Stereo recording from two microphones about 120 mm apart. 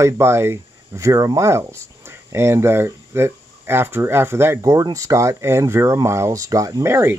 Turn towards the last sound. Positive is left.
turn(degrees=-20)  # may be behind; listen again after turning